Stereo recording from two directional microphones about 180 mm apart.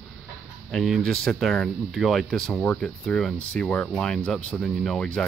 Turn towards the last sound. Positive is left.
turn(degrees=5)  # may be behind; listen again after turning